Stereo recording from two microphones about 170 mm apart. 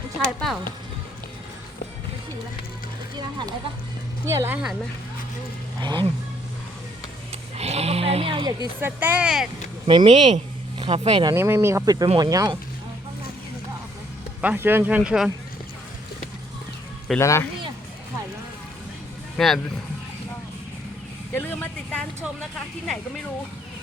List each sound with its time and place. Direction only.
0.3 s speech: centre (ahead or behind)
3.2 s speech: 25° right (ahead or behind)
4.3 s speech: 15° right (ahead or behind)
7.5 s speech: 40° right (ahead or behind)
8.8 s speech: 10° right (ahead or behind)
9.8 s speech: 30° right (ahead or behind)
11.3 s speech: 15° right (ahead or behind)
14.4 s speech: 10° right (ahead or behind)
17.2 s speech: 15° left (ahead or behind)
19.4 s speech: centre (ahead or behind)
21.3 s vehicle: 10° left (ahead or behind)
22.2 s speech: 5° left (ahead or behind)